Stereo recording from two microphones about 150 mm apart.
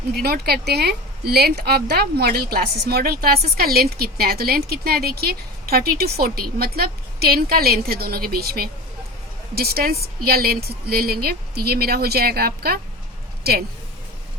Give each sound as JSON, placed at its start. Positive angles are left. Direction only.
{"t": 0.1, "sound": "speech", "side_deg": -90}